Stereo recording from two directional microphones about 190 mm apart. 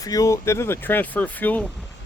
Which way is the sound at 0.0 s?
20° left (ahead or behind).